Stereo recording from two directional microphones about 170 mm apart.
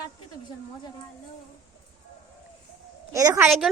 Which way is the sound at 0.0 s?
25° left (ahead or behind).